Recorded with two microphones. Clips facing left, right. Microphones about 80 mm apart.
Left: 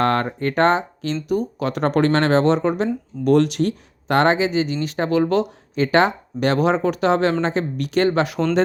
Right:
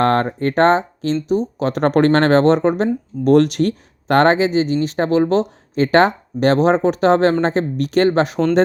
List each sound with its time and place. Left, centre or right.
0.0 s speech: right